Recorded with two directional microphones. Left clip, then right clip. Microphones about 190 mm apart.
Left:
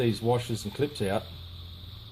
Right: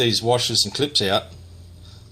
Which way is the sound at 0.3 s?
15° right (ahead or behind).